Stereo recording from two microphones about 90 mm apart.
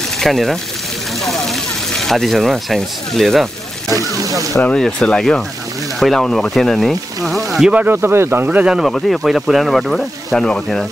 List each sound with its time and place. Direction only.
0.2 s speech: 5° left (ahead or behind)
3.9 s speech: 40° right (ahead or behind)
4.7 s speech: 10° left (ahead or behind)
7.7 s speech: 20° right (ahead or behind)
8.5 s speech: 10° right (ahead or behind); by 10.9 s 5° left (ahead or behind)